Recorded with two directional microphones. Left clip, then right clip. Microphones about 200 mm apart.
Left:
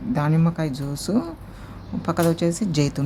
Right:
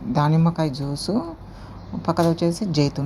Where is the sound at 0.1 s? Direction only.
5° right (ahead or behind).